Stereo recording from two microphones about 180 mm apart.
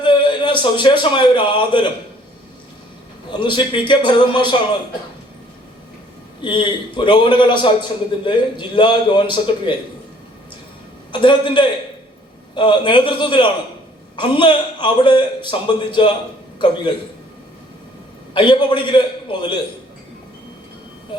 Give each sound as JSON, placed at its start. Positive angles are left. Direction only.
{"t": 0.0, "sound": "a man's voice", "side_deg": 25}
{"t": 3.3, "sound": "a man's voice", "side_deg": 25}
{"t": 6.4, "sound": "a man's voice", "side_deg": 25}
{"t": 11.1, "sound": "a man's voice", "side_deg": 25}
{"t": 18.3, "sound": "a man's voice", "side_deg": 25}